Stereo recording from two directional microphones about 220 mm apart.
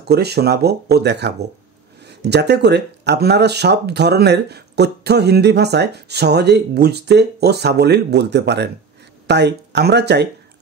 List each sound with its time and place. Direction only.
0.1 s speech: 45° right (ahead or behind)